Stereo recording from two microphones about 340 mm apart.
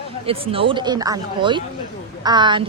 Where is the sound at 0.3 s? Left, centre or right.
Centre.